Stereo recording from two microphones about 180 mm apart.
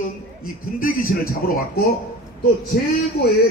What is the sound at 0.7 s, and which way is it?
A man's voice, 50° left (ahead or behind).